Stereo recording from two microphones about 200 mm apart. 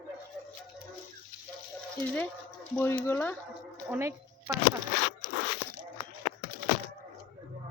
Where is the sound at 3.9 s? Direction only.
10° right (ahead or behind).